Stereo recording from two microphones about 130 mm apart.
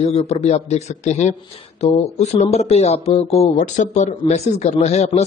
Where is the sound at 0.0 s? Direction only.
50° left (ahead or behind).